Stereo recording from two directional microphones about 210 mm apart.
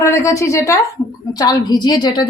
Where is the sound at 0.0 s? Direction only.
15° left (ahead or behind).